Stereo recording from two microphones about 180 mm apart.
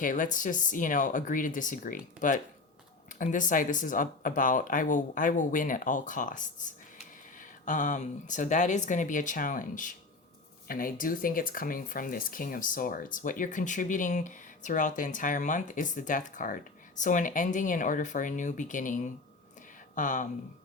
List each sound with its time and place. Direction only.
0.0 s speech: 45° left (ahead or behind)